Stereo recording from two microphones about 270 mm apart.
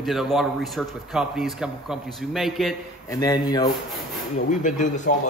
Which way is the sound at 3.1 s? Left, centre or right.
Centre.